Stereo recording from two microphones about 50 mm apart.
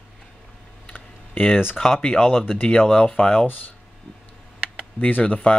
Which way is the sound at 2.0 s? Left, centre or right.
Left.